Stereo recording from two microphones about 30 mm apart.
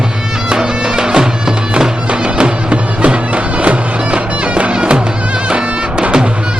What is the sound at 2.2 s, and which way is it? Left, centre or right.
Music, right.